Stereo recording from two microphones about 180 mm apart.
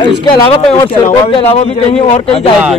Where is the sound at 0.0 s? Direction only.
25° left (ahead or behind).